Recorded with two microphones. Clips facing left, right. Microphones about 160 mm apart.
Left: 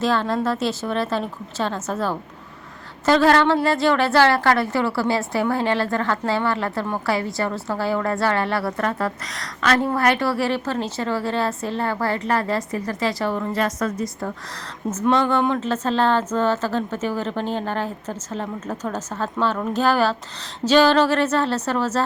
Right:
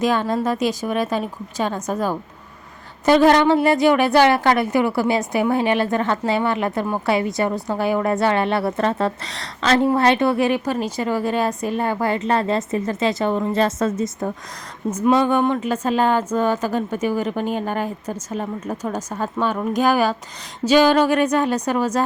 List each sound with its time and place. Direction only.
0.0 s a woman's voice: 15° right (ahead or behind)